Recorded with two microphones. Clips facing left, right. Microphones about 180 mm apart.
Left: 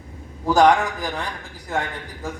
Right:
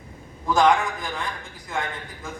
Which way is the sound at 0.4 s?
35° left (ahead or behind).